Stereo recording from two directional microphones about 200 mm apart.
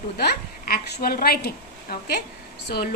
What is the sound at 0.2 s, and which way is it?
A woman's voice, 50° left (ahead or behind).